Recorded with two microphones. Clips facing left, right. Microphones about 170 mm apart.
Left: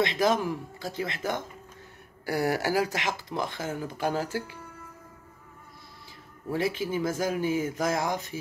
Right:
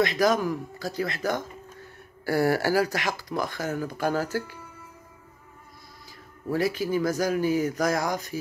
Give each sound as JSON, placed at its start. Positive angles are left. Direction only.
{"t": 0.0, "sound": "speech", "side_deg": 25}
{"t": 6.5, "sound": "speech", "side_deg": 25}